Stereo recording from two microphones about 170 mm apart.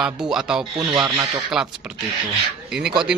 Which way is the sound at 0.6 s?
30° right (ahead or behind).